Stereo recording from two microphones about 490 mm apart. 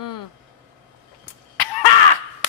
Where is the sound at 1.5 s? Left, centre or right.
Left.